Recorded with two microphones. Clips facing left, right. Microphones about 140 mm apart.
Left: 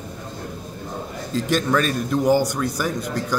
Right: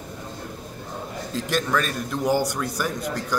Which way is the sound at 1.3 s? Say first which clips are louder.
Left 4 dB; centre (ahead or behind).